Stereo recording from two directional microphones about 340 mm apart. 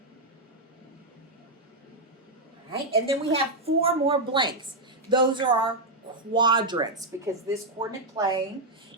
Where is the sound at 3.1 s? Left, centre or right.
Centre.